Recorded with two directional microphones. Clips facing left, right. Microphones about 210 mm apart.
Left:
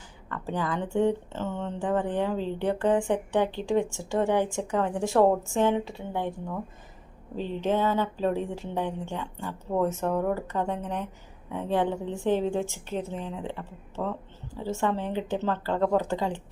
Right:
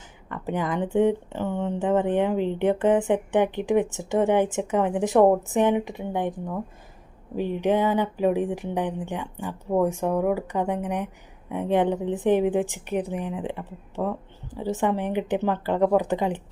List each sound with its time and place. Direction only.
0.3 s a woman's voice: 20° right (ahead or behind)